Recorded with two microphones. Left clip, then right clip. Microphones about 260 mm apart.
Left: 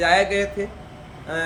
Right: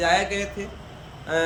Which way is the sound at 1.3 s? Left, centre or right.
Centre.